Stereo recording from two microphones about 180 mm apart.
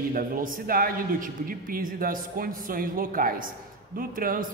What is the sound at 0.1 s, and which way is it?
A man's voice, 50° right (ahead or behind).